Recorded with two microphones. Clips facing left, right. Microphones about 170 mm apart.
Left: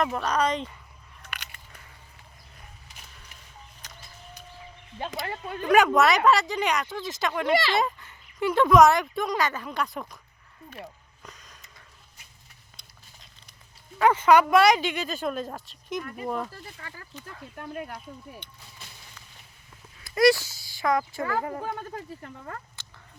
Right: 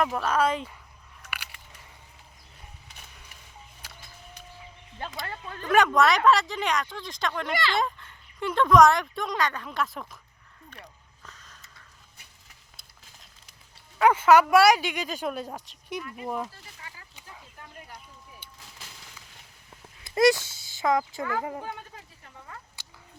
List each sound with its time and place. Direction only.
0.1 s speech: 5° right (ahead or behind)
1.2 s biting: 10° right (ahead or behind)
3.8 s a sound: 10° right (ahead or behind)
5.2 s speech: 15° left (ahead or behind)
5.7 s speech: centre (ahead or behind)
7.5 s speech: 20° left (ahead or behind)
7.8 s speech: 5° left (ahead or behind)
10.8 s a sound: 20° left (ahead or behind)
14.0 s speech: 5° right (ahead or behind)
17.6 s speech: 65° left (ahead or behind)
18.4 s speech: 5° right (ahead or behind)
20.1 s speech: 20° right (ahead or behind)
21.9 s speech: 55° left (ahead or behind)